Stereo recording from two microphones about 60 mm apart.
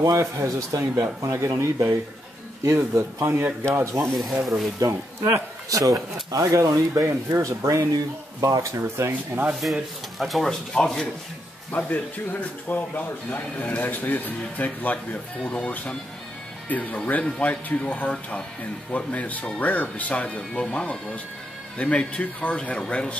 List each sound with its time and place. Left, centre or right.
0.2 s speech: right
1.2 s speech: right
4.2 s speech: centre
4.7 s speech: right
7.2 s speech: right
9.5 s speech: centre
10.7 s speech: centre
11.7 s speech: left
15.4 s speech: centre